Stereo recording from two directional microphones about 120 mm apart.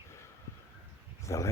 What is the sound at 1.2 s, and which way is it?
Speech, 25° left (ahead or behind).